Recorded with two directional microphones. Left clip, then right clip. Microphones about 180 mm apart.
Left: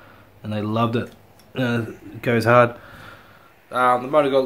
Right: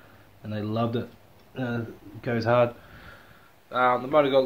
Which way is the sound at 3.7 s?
5° left (ahead or behind).